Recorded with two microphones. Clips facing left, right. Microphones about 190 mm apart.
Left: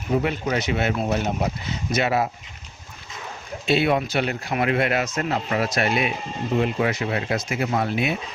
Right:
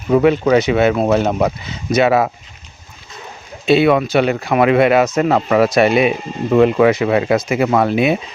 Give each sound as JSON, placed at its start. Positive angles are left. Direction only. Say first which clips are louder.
{"t": 0.1, "sound": "speech", "louder": "right 11 dB", "side_deg": -90}
{"t": 3.7, "sound": "speech", "louder": "right 8 dB", "side_deg": -85}